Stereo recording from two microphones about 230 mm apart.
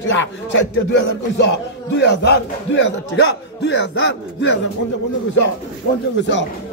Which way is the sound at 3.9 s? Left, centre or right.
Left.